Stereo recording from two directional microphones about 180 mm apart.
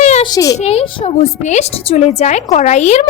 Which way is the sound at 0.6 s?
35° left (ahead or behind).